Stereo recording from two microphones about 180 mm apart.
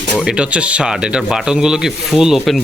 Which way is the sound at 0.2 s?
5° right (ahead or behind).